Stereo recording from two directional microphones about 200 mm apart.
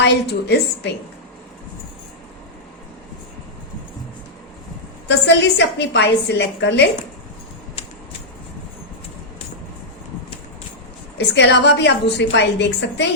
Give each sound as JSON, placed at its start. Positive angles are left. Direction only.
{"t": 0.0, "sound": "a woman's voice", "side_deg": 60}
{"t": 5.0, "sound": "a woman's voice", "side_deg": 60}
{"t": 11.3, "sound": "a woman's voice", "side_deg": 60}